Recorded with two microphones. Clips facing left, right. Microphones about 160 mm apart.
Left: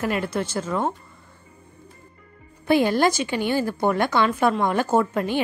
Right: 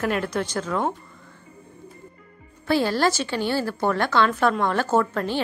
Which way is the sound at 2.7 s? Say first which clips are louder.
Left 2 dB; 15° left (ahead or behind).